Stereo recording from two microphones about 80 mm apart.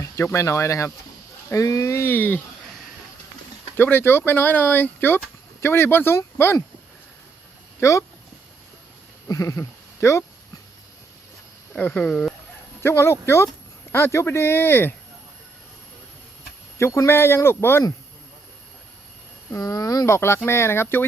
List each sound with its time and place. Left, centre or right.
0.0 s speech: left
3.8 s speech: left
7.8 s speech: left
9.2 s speech: left
11.8 s speech: centre
12.8 s speech: left
16.7 s speech: left
19.5 s speech: left
20.1 s speech: left